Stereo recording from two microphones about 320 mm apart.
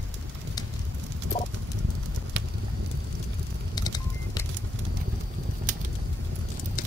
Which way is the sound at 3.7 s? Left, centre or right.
Centre.